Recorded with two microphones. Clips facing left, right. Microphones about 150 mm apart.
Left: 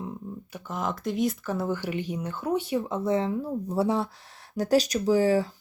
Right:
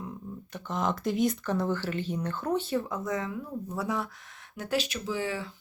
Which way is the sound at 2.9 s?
30° left (ahead or behind).